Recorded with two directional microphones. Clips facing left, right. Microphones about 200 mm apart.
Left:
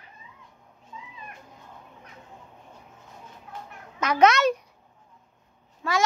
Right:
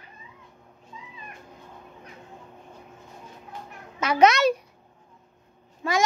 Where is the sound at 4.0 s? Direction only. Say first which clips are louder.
Right 1 dB; 10° right (ahead or behind).